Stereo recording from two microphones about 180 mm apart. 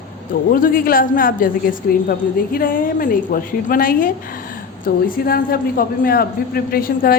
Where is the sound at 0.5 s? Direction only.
55° left (ahead or behind).